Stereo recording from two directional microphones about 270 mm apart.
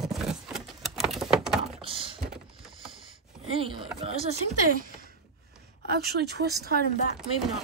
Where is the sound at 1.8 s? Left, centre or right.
Centre.